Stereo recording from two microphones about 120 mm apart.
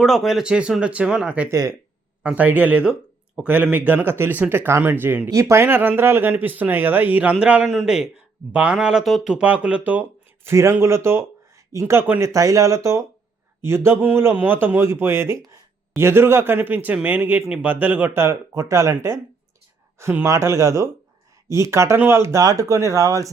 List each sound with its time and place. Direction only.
0.0 s a man's voice: centre (ahead or behind)
1.5 s speech: 25° right (ahead or behind)
2.2 s a man's voice: 15° right (ahead or behind)
12.3 s a man's voice: 30° right (ahead or behind)